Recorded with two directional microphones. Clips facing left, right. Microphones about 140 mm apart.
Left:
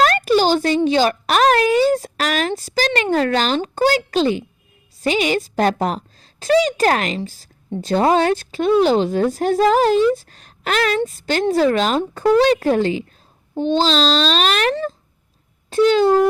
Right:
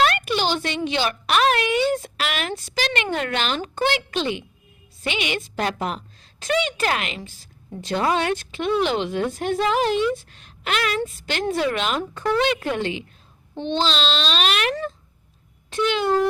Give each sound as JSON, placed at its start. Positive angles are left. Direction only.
{"t": 0.0, "sound": "a woman's voice", "side_deg": 40}